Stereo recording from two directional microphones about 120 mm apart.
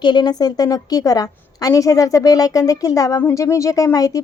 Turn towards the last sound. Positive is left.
turn(degrees=30)  # may be behind; listen again after turning